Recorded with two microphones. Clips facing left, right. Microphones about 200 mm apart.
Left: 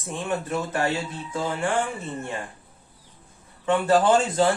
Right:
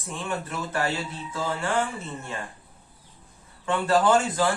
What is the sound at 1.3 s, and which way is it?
Music, 15° left (ahead or behind).